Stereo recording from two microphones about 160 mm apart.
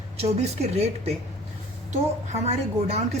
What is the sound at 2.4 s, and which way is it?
Speech, 40° right (ahead or behind).